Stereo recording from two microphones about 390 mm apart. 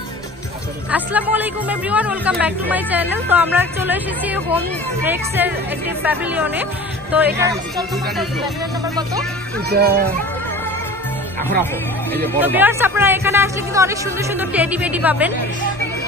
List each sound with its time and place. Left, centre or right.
0.9 s speech: centre
9.7 s a child's voice: right
12.1 s speech: centre